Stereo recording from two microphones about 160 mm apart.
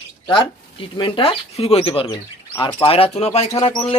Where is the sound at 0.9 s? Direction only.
30° left (ahead or behind).